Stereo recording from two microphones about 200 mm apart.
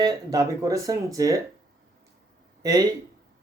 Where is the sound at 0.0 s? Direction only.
20° right (ahead or behind).